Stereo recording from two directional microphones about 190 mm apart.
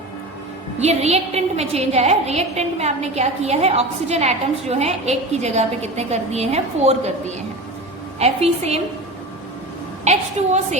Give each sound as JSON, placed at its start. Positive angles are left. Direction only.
{"t": 0.8, "sound": "a woman's voice", "side_deg": -35}
{"t": 10.0, "sound": "a woman's voice", "side_deg": -35}